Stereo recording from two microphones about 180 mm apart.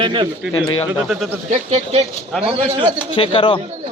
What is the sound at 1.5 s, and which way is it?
Speech, 35° right (ahead or behind).